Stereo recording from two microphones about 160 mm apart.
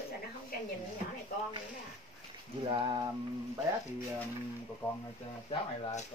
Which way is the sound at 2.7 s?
30° right (ahead or behind).